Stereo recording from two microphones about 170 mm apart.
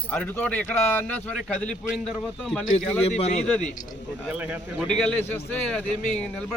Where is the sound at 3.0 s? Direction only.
40° left (ahead or behind).